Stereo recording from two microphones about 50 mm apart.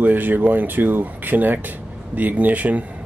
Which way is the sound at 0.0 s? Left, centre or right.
Right.